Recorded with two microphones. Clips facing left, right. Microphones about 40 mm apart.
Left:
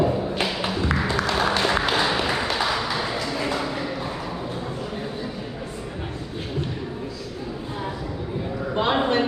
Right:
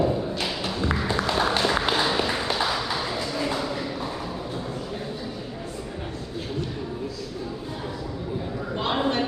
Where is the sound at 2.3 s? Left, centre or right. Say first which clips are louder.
Left 2 dB; centre.